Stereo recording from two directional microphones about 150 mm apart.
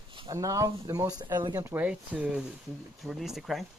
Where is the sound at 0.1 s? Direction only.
35° right (ahead or behind).